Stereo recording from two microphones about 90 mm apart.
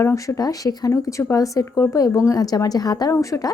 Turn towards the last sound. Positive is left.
turn(degrees=40)  # may be behind; listen again after turning